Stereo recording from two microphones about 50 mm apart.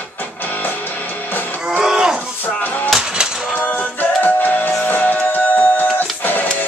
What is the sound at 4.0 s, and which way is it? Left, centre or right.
Music, left.